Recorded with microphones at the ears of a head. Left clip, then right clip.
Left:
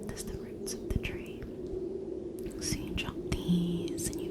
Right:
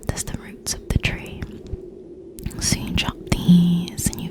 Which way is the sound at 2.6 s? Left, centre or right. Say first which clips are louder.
Right 14 dB; right.